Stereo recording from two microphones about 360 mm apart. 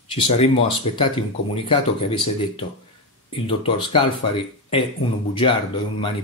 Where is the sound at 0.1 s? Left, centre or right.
Centre.